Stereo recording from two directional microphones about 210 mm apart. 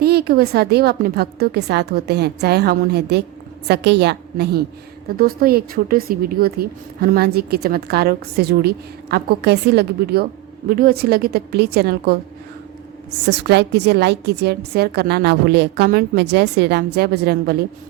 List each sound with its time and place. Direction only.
0.0 s speech: 50° right (ahead or behind)
13.2 s speech: 55° right (ahead or behind)